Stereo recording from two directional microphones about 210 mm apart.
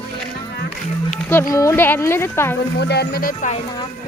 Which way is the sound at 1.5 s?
15° left (ahead or behind).